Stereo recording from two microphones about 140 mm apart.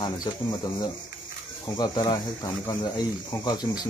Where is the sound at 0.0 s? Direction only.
30° left (ahead or behind).